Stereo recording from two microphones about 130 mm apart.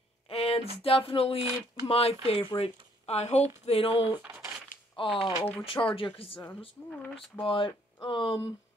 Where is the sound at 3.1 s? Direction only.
60° left (ahead or behind).